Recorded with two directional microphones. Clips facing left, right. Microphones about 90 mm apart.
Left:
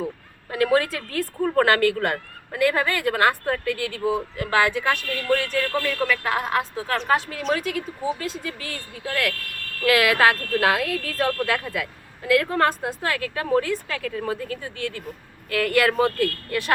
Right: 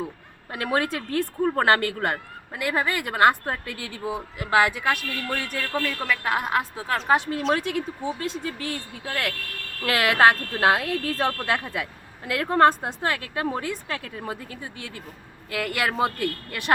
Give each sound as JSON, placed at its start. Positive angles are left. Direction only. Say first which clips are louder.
{"t": 0.5, "sound": "a woman's voice", "louder": "left 5 dB", "side_deg": -25}
{"t": 7.1, "sound": "a woman's voice", "louder": "right 2 dB", "side_deg": -25}